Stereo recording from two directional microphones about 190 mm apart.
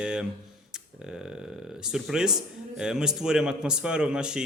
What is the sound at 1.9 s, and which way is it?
A man's voice, 5° right (ahead or behind).